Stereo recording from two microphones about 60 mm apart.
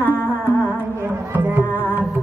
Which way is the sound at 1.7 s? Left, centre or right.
Left.